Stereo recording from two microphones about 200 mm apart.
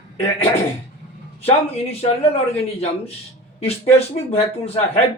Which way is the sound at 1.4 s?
30° left (ahead or behind).